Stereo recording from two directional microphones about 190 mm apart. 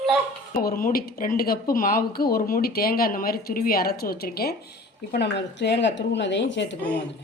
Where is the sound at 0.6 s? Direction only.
50° left (ahead or behind); by 6.7 s 70° left (ahead or behind).